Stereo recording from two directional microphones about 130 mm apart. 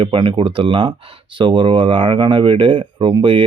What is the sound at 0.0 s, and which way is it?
Speech, 40° right (ahead or behind).